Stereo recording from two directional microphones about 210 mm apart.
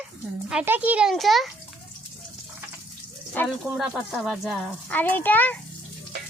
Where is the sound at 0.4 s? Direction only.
5° right (ahead or behind).